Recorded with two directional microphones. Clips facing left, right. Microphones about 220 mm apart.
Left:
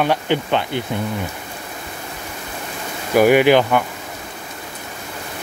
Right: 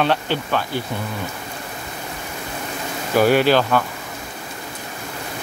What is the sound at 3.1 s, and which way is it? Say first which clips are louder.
Speech: left 3 dB; 15° left (ahead or behind).